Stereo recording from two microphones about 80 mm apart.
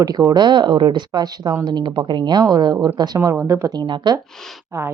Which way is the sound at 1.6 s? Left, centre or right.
Right.